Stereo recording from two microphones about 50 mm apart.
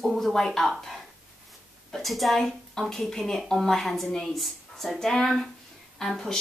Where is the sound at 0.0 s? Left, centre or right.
Centre.